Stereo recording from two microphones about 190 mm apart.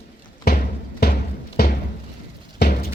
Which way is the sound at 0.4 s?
50° left (ahead or behind).